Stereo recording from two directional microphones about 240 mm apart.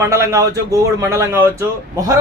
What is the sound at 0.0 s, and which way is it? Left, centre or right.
Speech, centre.